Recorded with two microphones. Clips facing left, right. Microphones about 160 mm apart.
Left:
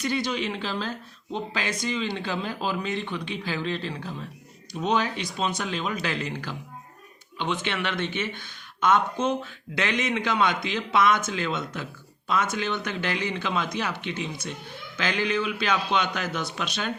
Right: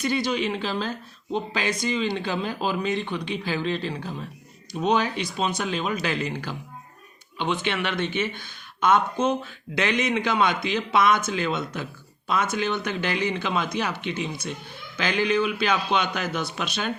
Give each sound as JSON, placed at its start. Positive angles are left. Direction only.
{"t": 0.0, "sound": "speech", "side_deg": -10}
{"t": 7.6, "sound": "speech", "side_deg": -15}
{"t": 9.7, "sound": "speech", "side_deg": -15}